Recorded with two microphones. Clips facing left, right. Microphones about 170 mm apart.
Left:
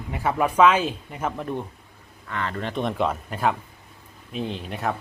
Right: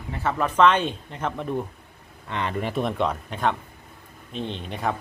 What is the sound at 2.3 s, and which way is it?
Speech, 20° right (ahead or behind).